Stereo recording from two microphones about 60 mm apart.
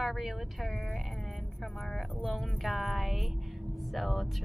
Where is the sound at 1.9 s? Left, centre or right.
Centre.